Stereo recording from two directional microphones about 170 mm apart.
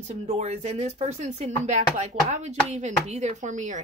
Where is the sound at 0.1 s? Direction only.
40° right (ahead or behind).